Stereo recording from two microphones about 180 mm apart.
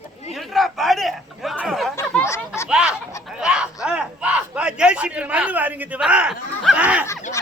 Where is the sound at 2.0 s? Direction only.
15° left (ahead or behind).